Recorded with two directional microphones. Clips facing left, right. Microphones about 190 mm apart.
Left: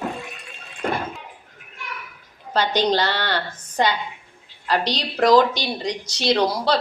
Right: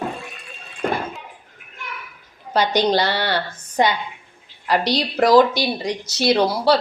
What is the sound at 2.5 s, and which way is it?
Speech, 10° right (ahead or behind).